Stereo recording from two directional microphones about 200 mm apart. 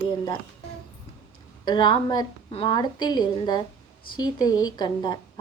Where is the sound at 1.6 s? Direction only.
20° left (ahead or behind).